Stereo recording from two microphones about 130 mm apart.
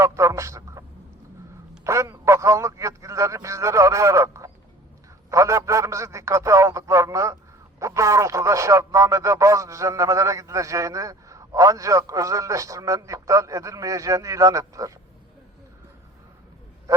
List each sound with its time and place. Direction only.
0.0 s a man's voice: 25° right (ahead or behind)